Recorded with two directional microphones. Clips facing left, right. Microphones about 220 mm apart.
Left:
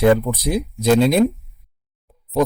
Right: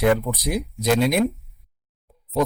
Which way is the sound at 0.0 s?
30° left (ahead or behind).